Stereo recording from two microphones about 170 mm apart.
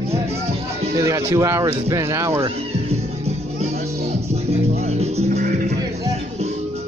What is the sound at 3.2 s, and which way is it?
Music, 40° right (ahead or behind).